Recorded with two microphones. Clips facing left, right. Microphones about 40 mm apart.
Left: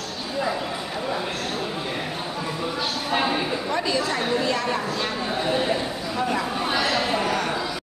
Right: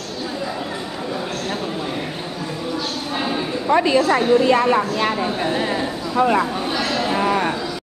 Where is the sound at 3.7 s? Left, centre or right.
Right.